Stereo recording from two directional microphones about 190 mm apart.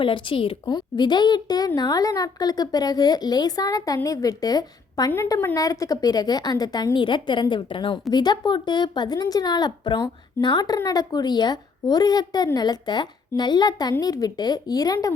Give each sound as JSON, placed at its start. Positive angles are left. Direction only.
{"t": 0.0, "sound": "a woman's voice", "side_deg": 25}